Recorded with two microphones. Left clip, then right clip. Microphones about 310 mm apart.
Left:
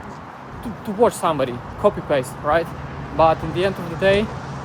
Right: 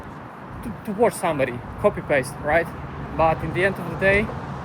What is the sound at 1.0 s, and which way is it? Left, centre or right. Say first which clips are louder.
Speech: left 3 dB; centre.